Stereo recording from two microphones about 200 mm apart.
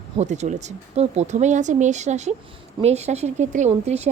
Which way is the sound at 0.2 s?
35° right (ahead or behind).